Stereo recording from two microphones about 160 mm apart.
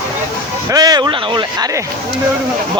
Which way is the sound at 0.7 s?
25° right (ahead or behind).